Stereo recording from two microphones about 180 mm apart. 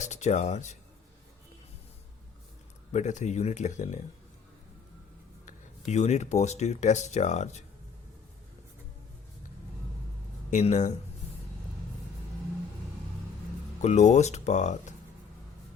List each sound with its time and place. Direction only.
0.0 s speech: 40° left (ahead or behind)
2.9 s speech: 40° left (ahead or behind)
5.9 s speech: 40° left (ahead or behind)
10.5 s speech: 40° left (ahead or behind)
13.8 s speech: 40° left (ahead or behind)